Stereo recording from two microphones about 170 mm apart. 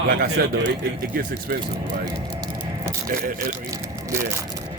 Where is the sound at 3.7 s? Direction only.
15° right (ahead or behind).